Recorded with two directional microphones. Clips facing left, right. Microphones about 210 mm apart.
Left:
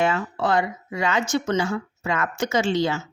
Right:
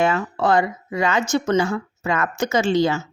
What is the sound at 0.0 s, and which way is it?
A woman's voice, 45° right (ahead or behind).